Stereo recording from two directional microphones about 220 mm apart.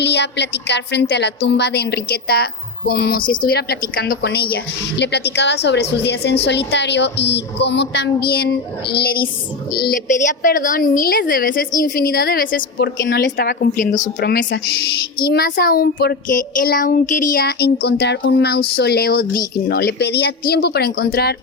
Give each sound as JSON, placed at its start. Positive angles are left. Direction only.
{"t": 0.0, "sound": "a woman's voice", "side_deg": 50}
{"t": 14.2, "sound": "a woman's voice", "side_deg": 50}